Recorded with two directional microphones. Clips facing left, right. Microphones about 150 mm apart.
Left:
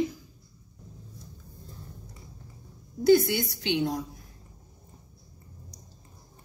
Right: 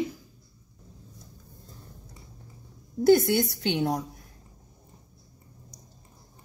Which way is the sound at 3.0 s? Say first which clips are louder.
Right 1 dB; 55° right (ahead or behind).